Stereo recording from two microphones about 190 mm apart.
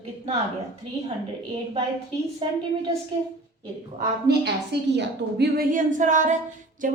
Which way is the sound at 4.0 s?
55° right (ahead or behind).